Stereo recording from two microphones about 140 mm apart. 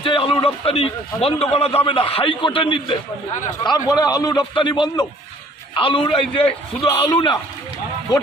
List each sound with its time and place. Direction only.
0.0 s a man's voice: 40° left (ahead or behind)
3.6 s a man's voice: 30° left (ahead or behind)